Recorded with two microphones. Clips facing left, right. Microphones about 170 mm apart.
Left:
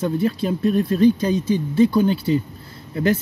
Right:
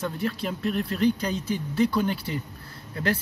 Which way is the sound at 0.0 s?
25° left (ahead or behind).